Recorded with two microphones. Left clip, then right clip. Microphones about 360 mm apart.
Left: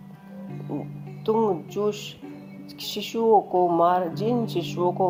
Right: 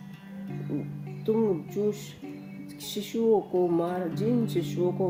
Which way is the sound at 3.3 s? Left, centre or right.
Left.